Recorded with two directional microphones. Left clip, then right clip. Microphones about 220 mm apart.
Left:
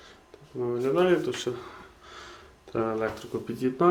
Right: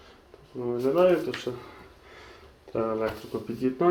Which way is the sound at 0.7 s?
20° left (ahead or behind).